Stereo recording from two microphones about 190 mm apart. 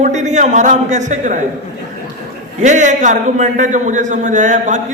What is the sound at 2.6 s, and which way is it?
A man's voice, 40° right (ahead or behind).